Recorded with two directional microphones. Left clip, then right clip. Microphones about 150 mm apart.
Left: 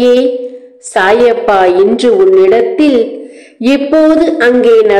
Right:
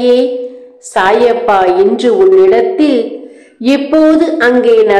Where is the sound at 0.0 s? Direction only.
30° left (ahead or behind).